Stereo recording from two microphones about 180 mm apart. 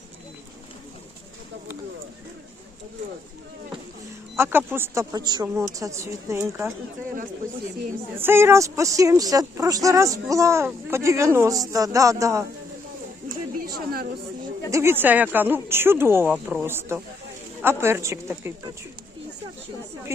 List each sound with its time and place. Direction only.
4.4 s speech: 10° right (ahead or behind)
8.1 s speech: 10° right (ahead or behind)
13.6 s a woman's voice: 55° right (ahead or behind)
14.7 s speech: 15° right (ahead or behind)
16.3 s speech: centre (ahead or behind)
16.6 s speech: 10° right (ahead or behind)
20.1 s speech: 15° right (ahead or behind)